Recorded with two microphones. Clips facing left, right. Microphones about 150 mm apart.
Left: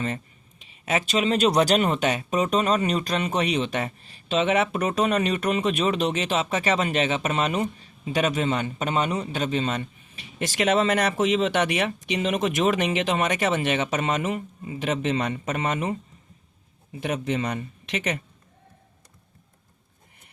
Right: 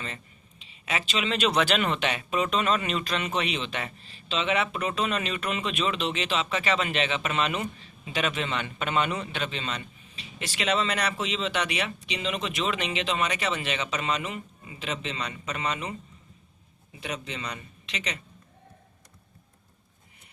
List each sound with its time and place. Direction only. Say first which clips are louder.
0.9 s speech: left 6 dB; 45° left (ahead or behind)
17.0 s speech: left 9 dB; 50° left (ahead or behind)